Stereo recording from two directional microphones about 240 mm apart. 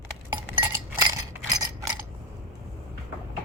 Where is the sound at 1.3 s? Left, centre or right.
Centre.